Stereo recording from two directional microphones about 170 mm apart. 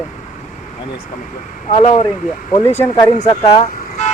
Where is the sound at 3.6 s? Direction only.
50° left (ahead or behind).